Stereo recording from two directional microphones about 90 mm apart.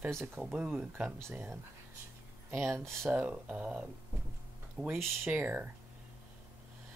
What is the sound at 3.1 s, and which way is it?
Speech, 10° right (ahead or behind).